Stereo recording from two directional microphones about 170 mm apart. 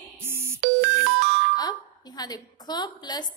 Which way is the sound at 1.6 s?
25° left (ahead or behind).